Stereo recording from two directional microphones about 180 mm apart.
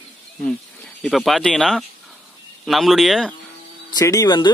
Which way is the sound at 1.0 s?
Centre (ahead or behind).